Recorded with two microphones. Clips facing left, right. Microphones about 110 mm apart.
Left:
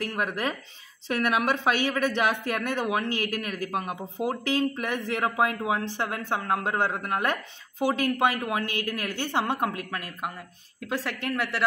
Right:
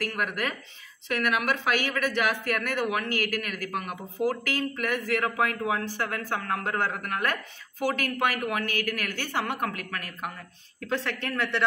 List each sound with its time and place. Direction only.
0.0 s speech: 25° left (ahead or behind)
10.8 s speech: 10° left (ahead or behind)